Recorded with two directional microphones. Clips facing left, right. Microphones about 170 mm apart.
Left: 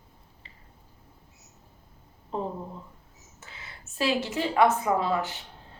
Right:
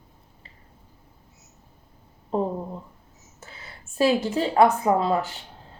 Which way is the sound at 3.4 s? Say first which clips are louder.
Right 2 dB; 40° right (ahead or behind).